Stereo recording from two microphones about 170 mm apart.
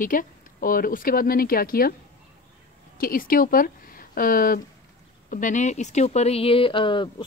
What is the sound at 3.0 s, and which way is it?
Speech, 55° left (ahead or behind).